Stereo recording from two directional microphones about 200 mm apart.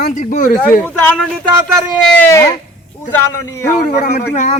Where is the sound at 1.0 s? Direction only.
5° left (ahead or behind).